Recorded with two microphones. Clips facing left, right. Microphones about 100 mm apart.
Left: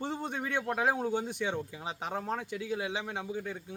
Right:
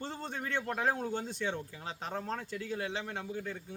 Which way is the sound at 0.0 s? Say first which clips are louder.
Left 4 dB; 15° left (ahead or behind).